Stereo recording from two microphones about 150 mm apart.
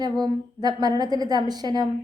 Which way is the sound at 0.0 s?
30° right (ahead or behind).